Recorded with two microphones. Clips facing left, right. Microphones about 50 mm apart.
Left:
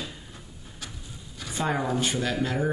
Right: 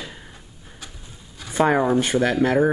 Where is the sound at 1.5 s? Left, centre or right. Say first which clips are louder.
Right 9 dB; right.